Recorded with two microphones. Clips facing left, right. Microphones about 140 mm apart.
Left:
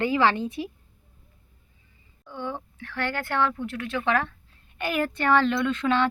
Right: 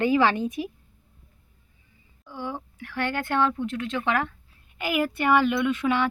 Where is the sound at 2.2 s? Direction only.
10° right (ahead or behind).